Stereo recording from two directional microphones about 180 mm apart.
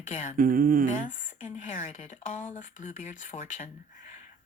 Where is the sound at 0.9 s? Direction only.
45° left (ahead or behind).